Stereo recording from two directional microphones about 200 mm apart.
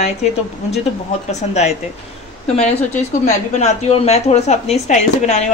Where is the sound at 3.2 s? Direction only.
35° left (ahead or behind).